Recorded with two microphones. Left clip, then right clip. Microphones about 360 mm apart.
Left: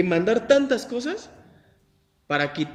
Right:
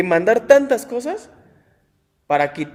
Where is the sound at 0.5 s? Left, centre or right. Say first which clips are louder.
Right 6 dB; centre.